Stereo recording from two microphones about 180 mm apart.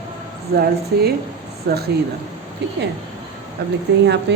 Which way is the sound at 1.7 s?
55° right (ahead or behind).